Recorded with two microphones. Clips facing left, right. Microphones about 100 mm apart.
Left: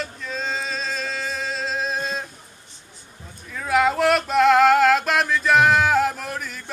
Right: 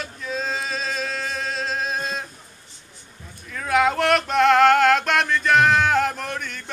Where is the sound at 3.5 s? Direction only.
Centre (ahead or behind).